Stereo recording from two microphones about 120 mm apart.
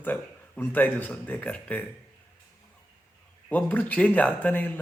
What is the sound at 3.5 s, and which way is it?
A man's voice, 15° left (ahead or behind).